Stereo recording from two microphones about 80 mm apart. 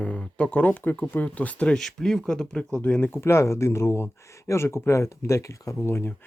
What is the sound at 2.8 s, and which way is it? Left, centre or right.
Speech, centre.